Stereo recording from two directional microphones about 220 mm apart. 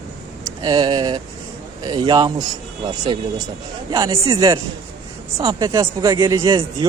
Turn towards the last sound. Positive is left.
turn(degrees=-20)  # may be behind; listen again after turning